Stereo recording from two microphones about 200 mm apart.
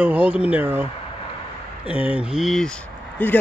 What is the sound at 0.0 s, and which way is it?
Speech, 5° right (ahead or behind).